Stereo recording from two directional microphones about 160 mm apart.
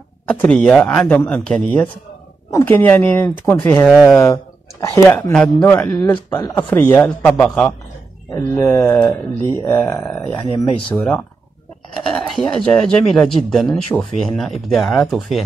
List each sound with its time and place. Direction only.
0.3 s speech: 10° left (ahead or behind)
4.2 s speech: 20° left (ahead or behind)
10.4 s speech: 35° left (ahead or behind)
12.2 s speech: centre (ahead or behind)